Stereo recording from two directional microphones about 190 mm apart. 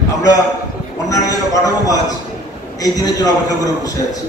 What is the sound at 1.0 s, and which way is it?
A man's voice, 20° left (ahead or behind).